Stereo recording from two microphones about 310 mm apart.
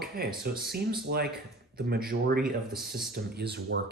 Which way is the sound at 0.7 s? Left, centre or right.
Right.